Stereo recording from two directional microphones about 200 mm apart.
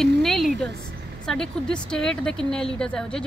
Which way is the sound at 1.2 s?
5° left (ahead or behind).